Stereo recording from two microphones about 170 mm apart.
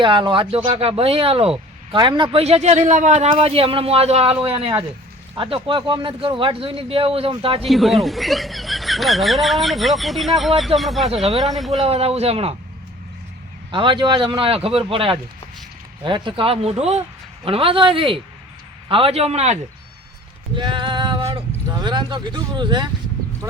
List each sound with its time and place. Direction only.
0.0 s speech: 30° right (ahead or behind)
7.7 s speech: centre (ahead or behind)
11.1 s speech: 35° right (ahead or behind)
11.4 s speech: centre (ahead or behind)
11.8 s speech: 35° right (ahead or behind)
13.7 s speech: 30° right (ahead or behind)
20.6 s male singing: 30° right (ahead or behind)
21.7 s speech: 25° right (ahead or behind)